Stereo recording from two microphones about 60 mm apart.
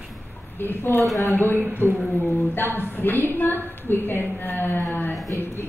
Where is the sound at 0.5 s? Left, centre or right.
Left.